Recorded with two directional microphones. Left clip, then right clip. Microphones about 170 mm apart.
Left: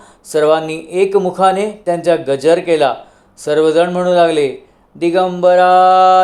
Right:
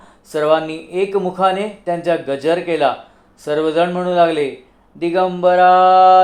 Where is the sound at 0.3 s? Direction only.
40° left (ahead or behind).